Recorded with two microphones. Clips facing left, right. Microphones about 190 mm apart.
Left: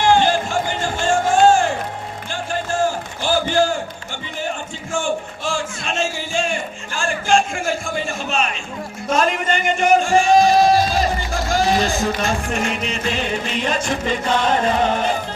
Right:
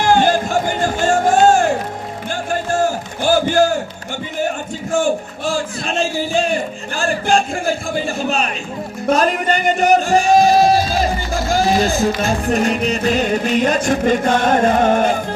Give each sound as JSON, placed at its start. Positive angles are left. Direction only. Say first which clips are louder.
{"t": 0.1, "sound": "music", "louder": "right 4 dB", "side_deg": -45}
{"t": 3.2, "sound": "a sound", "louder": "right 4 dB", "side_deg": -45}
{"t": 9.1, "sound": "speech", "louder": "right 1 dB", "side_deg": -35}
{"t": 11.9, "sound": "music", "louder": "right 3 dB", "side_deg": -35}